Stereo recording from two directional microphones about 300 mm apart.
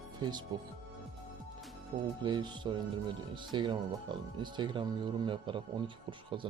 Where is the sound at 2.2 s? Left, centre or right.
Centre.